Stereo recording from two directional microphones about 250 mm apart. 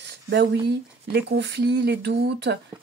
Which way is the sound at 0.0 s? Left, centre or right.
Right.